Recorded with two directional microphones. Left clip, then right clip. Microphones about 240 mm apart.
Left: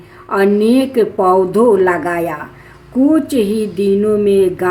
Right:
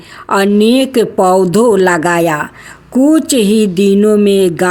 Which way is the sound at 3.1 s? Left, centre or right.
Right.